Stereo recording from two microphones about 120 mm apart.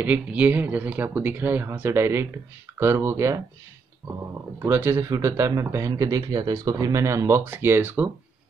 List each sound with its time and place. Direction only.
0.0 s speech: 10° right (ahead or behind)